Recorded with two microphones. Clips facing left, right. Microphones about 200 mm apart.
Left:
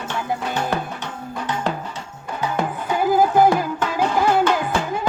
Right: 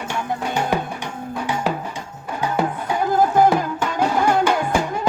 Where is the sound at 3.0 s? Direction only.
5° left (ahead or behind).